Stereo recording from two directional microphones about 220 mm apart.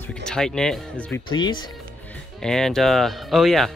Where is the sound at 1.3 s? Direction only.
20° left (ahead or behind).